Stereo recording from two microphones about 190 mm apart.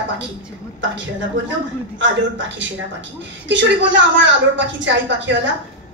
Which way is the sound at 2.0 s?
75° right (ahead or behind).